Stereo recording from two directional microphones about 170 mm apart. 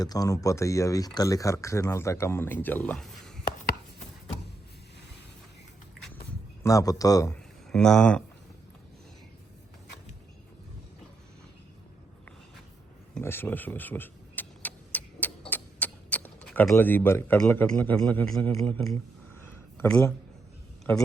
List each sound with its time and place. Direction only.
0.0 s speech: 20° left (ahead or behind); by 3.3 s 5° left (ahead or behind)
6.6 s speech: 20° left (ahead or behind)
7.7 s speech: 5° left (ahead or behind)
13.1 s vehicle: 10° left (ahead or behind)
19.8 s speech: 10° left (ahead or behind)